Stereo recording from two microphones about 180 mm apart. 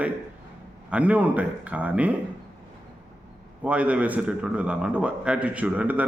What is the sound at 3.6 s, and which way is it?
A man's voice, 5° right (ahead or behind).